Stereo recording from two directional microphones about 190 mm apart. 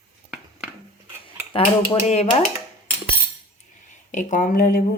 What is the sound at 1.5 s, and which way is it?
Dishes, 35° left (ahead or behind).